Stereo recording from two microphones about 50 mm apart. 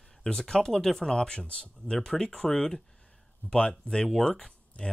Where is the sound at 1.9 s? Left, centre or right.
Centre.